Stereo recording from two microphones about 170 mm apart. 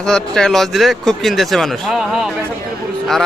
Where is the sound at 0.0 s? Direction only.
5° left (ahead or behind).